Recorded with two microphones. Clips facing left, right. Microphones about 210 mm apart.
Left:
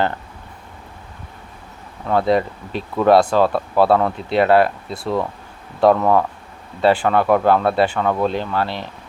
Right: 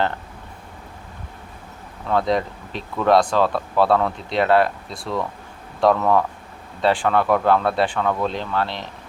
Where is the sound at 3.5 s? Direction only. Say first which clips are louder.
Left 3 dB; 30° left (ahead or behind).